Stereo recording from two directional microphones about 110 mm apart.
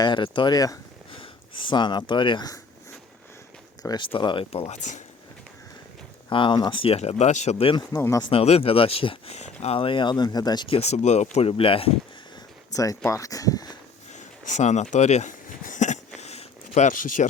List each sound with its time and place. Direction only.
0.0 s speech: 45° left (ahead or behind)
1.1 s speech: 50° left (ahead or behind)
4.1 s speech: 50° left (ahead or behind)
4.5 s speech: 80° left
6.2 s speech: 45° left (ahead or behind); by 7.7 s 90° left
7.7 s speech: 40° left (ahead or behind)
8.3 s speech: 65° left (ahead or behind); by 9.7 s 80° left
9.7 s speech: 50° left (ahead or behind)
10.7 s speech: 75° left (ahead or behind); by 11.9 s 55° left (ahead or behind)
12.7 s speech: 30° left (ahead or behind)
14.1 s speech: 90° left
15.9 s a sound: 85° left
17.2 s speech: 90° left